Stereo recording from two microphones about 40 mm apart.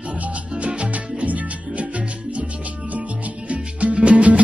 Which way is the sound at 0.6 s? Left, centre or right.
Right.